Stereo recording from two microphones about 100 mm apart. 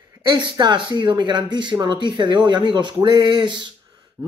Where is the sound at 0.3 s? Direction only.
50° right (ahead or behind).